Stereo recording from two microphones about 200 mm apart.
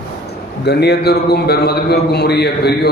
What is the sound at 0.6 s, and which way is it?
A man's voice, 55° left (ahead or behind).